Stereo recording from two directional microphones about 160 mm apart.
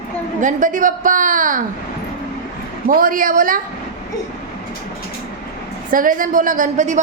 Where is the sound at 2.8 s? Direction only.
60° right (ahead or behind).